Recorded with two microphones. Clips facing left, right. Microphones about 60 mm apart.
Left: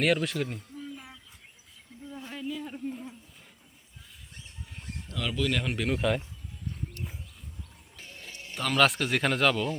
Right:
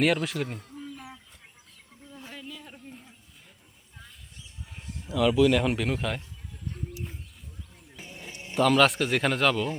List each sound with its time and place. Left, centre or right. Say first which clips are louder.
0.0 s speech: right 1 dB; centre
2.2 s a sound: left 7 dB; centre
5.0 s speech: right 9 dB; centre
6.9 s wild animals: right 2 dB; centre
7.9 s music: right 3 dB; centre
8.5 s speech: right 4 dB; centre